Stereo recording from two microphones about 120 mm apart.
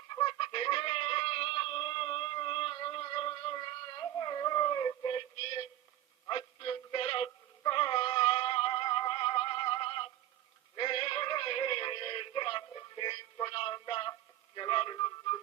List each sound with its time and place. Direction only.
0.1 s cat: 40° left (ahead or behind)
4.1 s synthetic singing: 35° left (ahead or behind)
13.4 s music: 45° left (ahead or behind)